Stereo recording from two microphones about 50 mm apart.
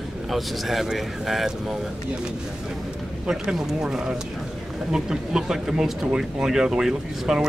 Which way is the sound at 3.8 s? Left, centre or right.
Centre.